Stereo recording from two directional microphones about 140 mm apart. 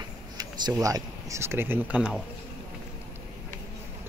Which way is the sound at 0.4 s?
25° right (ahead or behind).